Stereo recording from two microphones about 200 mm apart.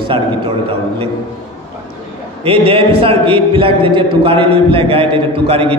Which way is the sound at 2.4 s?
30° right (ahead or behind).